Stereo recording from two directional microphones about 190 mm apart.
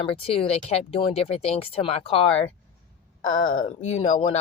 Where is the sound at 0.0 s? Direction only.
30° left (ahead or behind).